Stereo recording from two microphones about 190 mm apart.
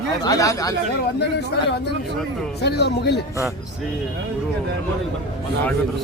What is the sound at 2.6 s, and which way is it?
Speech, 60° left (ahead or behind).